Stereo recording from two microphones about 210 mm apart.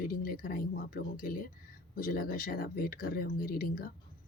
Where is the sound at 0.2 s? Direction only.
45° left (ahead or behind).